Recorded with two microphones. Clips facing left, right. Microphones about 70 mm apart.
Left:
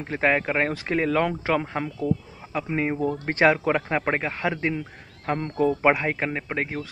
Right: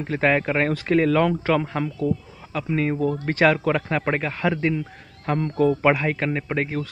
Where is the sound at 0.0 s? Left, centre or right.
Centre.